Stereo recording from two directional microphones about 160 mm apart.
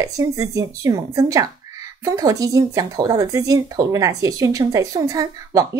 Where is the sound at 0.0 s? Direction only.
20° right (ahead or behind).